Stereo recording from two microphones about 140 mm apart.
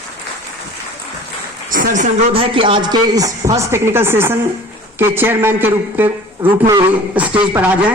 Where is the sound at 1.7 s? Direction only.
70° right (ahead or behind).